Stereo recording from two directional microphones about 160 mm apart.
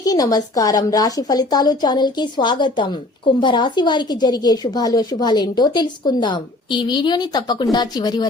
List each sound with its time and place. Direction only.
0.0 s a woman's voice: 20° left (ahead or behind)